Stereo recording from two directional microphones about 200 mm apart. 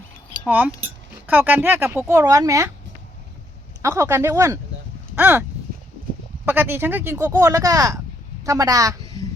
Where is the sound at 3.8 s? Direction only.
15° right (ahead or behind).